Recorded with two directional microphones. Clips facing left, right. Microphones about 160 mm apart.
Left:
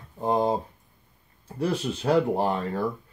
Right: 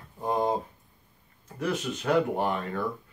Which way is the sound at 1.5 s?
30° left (ahead or behind).